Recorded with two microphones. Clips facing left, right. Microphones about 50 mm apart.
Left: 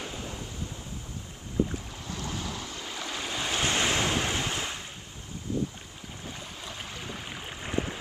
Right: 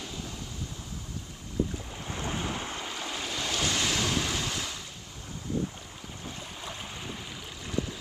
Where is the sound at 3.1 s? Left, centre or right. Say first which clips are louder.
Left 2 dB; left.